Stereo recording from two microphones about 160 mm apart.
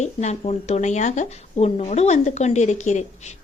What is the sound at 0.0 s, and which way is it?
Speech, 45° left (ahead or behind).